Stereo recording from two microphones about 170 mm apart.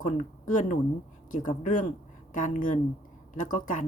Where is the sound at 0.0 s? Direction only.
50° left (ahead or behind).